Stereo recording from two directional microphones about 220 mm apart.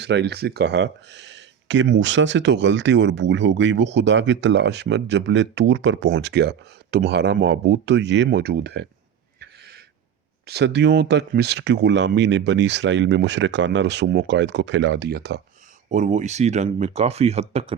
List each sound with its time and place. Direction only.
0.0 s speech: 50° right (ahead or behind)
9.4 s a sound: 45° right (ahead or behind)
10.4 s speech: 50° right (ahead or behind)
15.9 s speech: 35° right (ahead or behind)